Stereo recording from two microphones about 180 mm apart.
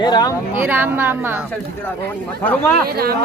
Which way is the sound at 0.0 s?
25° left (ahead or behind).